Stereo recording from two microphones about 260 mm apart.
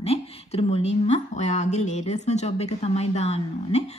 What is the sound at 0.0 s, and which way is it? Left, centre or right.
A woman's voice, left.